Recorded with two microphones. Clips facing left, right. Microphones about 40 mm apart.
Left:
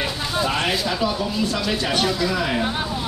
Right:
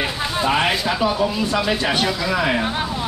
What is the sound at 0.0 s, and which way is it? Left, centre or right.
Speech, right.